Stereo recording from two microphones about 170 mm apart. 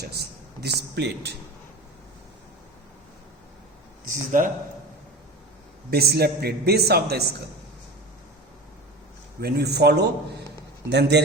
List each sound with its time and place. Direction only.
0.0 s a man's voice: 70° right (ahead or behind)
4.1 s speech: 50° right (ahead or behind)
5.9 s a man's voice: 70° right (ahead or behind)
9.4 s a man's voice: 70° right (ahead or behind)